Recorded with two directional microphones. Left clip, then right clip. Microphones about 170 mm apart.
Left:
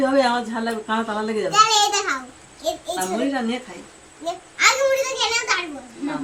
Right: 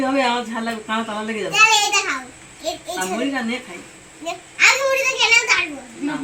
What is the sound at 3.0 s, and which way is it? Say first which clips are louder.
Speech: right 3 dB; centre (ahead or behind).